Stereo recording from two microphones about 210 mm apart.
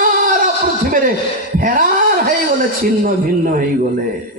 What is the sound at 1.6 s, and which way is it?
Speech, 40° right (ahead or behind).